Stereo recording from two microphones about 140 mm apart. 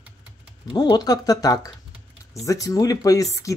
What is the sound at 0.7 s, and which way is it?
Speech, 30° left (ahead or behind).